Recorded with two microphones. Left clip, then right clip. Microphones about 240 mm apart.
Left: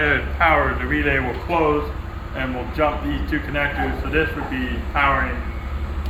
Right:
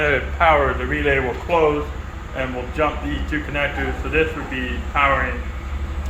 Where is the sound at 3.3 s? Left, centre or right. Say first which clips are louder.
Even; centre.